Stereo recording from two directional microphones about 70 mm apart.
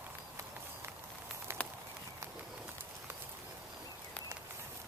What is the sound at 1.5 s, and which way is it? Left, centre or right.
Walk, right.